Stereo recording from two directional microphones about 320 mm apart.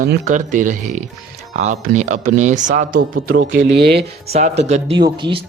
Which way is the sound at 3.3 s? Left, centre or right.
Right.